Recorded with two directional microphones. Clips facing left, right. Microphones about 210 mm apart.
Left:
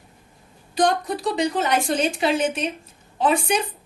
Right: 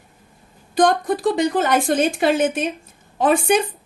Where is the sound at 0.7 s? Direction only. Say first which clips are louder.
Right 4 dB; 50° right (ahead or behind).